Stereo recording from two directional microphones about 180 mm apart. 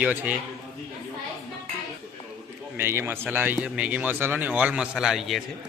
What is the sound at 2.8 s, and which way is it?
A man's voice, 15° right (ahead or behind).